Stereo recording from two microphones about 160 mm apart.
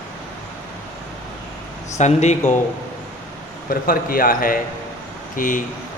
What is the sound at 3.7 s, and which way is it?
A man's voice, 60° left (ahead or behind).